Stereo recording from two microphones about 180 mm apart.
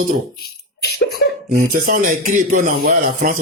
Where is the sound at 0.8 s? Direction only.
65° left (ahead or behind).